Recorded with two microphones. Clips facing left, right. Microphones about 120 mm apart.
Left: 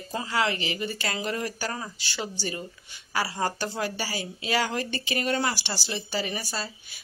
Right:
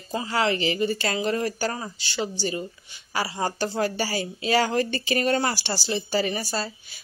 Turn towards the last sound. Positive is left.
turn(degrees=-35)  # may be behind; listen again after turning